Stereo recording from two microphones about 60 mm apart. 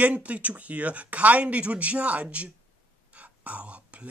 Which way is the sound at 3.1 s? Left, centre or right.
Right.